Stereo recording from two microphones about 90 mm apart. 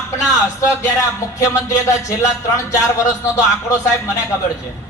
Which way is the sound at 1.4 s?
35° left (ahead or behind).